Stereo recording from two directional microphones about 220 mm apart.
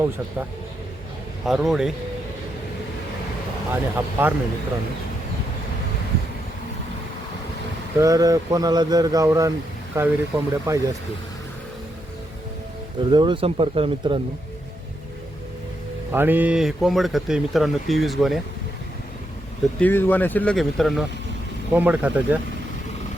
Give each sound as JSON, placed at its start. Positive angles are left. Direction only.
{"t": 1.5, "sound": "speech", "side_deg": 0}
{"t": 3.9, "sound": "speech", "side_deg": -10}
{"t": 7.9, "sound": "speech", "side_deg": -15}
{"t": 13.0, "sound": "speech", "side_deg": -20}
{"t": 16.1, "sound": "speech", "side_deg": -10}
{"t": 19.8, "sound": "speech", "side_deg": 10}